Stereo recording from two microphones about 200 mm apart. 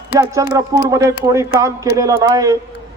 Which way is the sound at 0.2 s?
15° right (ahead or behind).